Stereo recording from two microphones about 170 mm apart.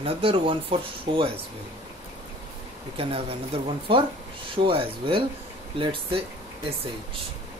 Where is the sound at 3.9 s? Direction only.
30° right (ahead or behind).